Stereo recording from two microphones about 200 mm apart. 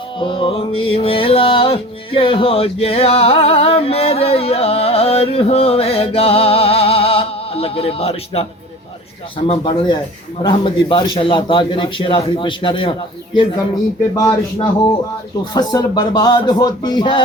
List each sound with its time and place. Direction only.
0.2 s music: 25° left (ahead or behind)
9.5 s music: 30° left (ahead or behind)
14.2 s speech: 15° left (ahead or behind)
15.5 s music: 20° left (ahead or behind)